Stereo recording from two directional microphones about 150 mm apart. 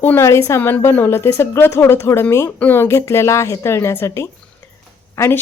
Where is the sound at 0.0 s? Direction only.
15° left (ahead or behind).